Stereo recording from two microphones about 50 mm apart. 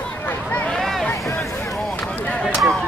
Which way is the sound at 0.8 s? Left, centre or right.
Centre.